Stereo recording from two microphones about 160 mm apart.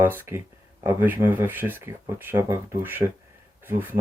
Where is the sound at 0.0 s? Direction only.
15° right (ahead or behind).